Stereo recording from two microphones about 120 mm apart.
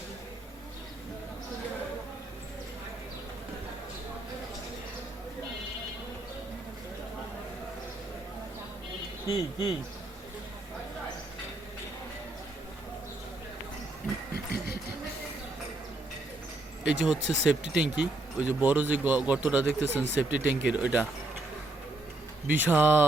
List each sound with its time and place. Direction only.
9.2 s speech: 35° left (ahead or behind)
16.8 s speech: 10° right (ahead or behind)
22.4 s speech: 15° right (ahead or behind)